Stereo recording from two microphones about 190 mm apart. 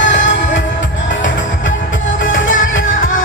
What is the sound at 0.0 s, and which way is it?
Music, 75° left (ahead or behind).